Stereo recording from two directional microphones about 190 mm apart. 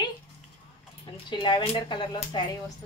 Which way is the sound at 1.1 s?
25° left (ahead or behind).